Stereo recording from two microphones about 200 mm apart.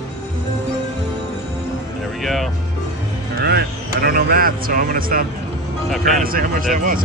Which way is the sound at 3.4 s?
50° right (ahead or behind).